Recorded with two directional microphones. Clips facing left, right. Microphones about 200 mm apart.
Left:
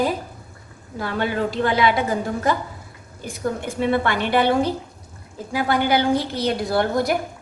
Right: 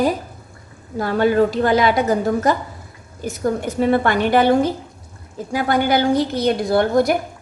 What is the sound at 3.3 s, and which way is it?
A woman's voice, 45° right (ahead or behind).